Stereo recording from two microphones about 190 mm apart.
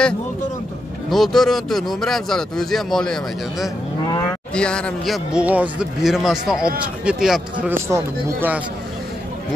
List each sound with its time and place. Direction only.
1.1 s speech: centre (ahead or behind)